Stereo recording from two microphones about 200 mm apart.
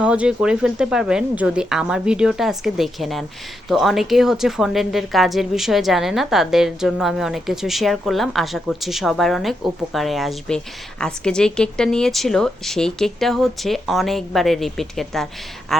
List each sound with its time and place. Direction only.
0.0 s a woman's voice: 5° right (ahead or behind)